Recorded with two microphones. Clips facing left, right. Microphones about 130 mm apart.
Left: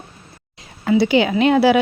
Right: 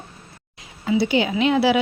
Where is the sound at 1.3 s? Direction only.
50° left (ahead or behind).